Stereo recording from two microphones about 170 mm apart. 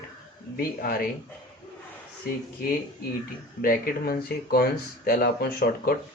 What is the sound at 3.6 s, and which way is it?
Speech, 60° left (ahead or behind).